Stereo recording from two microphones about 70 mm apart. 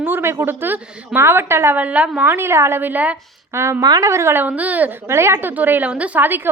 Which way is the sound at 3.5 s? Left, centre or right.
Right.